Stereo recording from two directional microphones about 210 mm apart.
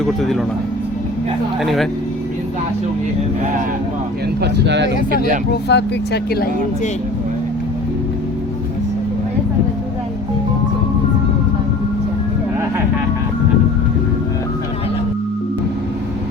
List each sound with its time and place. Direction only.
0.0 s speech: centre (ahead or behind)
1.6 s speech: centre (ahead or behind)
4.4 s speech: 55° right (ahead or behind)
5.1 s speech: 40° right (ahead or behind)
5.6 s speech: 50° left (ahead or behind)